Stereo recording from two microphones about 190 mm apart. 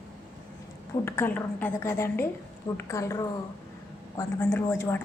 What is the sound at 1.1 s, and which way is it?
A woman's voice, 10° left (ahead or behind).